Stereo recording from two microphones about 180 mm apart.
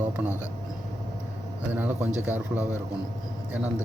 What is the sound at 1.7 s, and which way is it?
Speech, 10° right (ahead or behind).